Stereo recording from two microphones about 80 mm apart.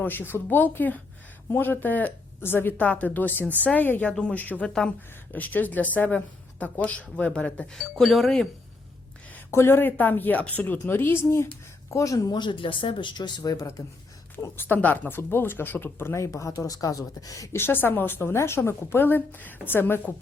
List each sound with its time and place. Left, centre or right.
0.0 s speech: left
4.1 s speech: centre
9.5 s speech: left
11.9 s speech: left
12.3 s speech: left
14.5 s speech: left
17.6 s speech: left